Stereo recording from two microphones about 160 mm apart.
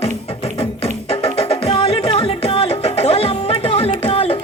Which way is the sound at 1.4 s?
40° left (ahead or behind).